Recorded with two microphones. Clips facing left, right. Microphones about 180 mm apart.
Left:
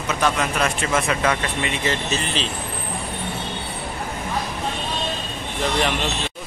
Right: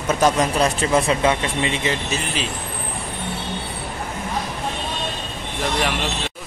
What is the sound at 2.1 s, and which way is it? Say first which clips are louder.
Speech: even; 10° right (ahead or behind).